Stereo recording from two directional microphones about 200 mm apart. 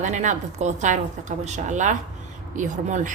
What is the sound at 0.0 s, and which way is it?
A woman's voice, 35° right (ahead or behind).